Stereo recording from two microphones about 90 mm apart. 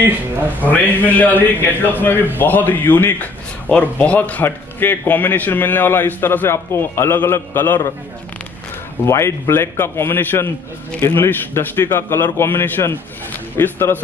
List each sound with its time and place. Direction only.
0.0 s speech: 20° right (ahead or behind)
1.0 s a man's voice: 20° left (ahead or behind)
9.0 s a man's voice: 30° left (ahead or behind)